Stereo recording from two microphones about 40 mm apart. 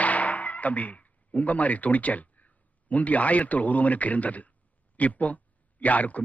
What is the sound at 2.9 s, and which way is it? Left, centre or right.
A man's voice, left.